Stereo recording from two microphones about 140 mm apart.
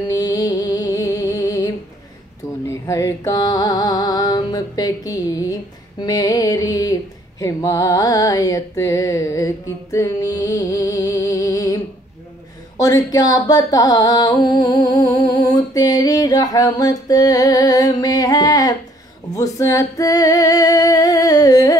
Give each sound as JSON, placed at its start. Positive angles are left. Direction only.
{"t": 0.1, "sound": "music", "side_deg": 25}
{"t": 12.8, "sound": "music", "side_deg": 25}